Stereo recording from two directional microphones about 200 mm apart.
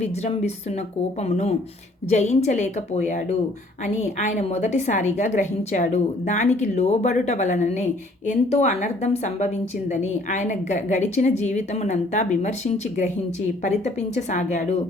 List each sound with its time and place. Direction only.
0.0 s a woman's voice: 35° left (ahead or behind)